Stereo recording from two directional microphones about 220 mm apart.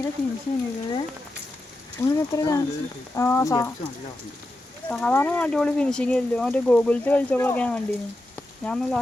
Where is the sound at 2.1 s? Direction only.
15° left (ahead or behind).